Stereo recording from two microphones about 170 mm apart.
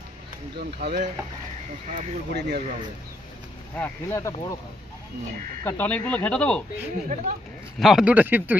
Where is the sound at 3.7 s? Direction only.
10° left (ahead or behind).